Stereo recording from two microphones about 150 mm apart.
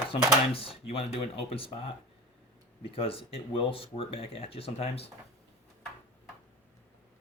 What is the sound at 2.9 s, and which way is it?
Speech, 40° left (ahead or behind).